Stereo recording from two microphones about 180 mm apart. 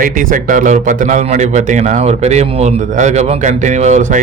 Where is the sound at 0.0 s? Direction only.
50° right (ahead or behind).